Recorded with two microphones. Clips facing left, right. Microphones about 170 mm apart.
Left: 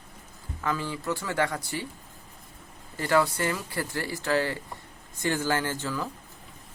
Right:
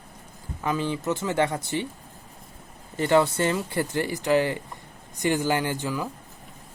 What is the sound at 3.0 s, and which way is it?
Speech, 20° right (ahead or behind).